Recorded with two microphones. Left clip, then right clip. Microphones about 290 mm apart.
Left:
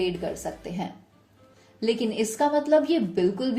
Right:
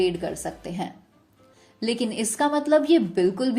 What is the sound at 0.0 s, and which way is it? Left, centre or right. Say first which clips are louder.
A woman's voice: right 3 dB; right.